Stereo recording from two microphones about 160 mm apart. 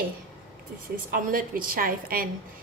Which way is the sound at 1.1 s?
65° right (ahead or behind).